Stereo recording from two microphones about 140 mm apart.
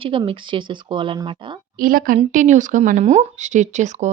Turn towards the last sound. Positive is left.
turn(degrees=-55)  # may be behind; listen again after turning